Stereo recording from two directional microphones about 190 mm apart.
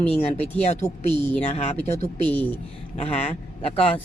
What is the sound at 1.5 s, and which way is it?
Speech, 35° left (ahead or behind).